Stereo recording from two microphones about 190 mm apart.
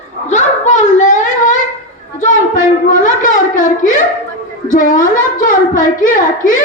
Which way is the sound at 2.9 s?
45° left (ahead or behind).